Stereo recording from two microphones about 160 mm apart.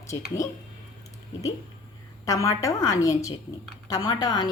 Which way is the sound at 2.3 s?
20° left (ahead or behind).